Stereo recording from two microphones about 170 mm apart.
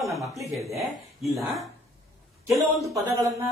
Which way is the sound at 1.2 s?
Centre (ahead or behind).